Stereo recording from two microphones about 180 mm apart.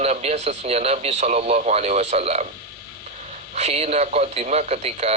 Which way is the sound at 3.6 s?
35° right (ahead or behind).